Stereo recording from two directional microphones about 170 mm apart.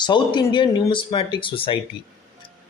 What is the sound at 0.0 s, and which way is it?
Speech, 25° left (ahead or behind).